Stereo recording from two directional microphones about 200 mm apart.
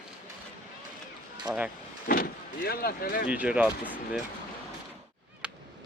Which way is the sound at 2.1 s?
50° left (ahead or behind).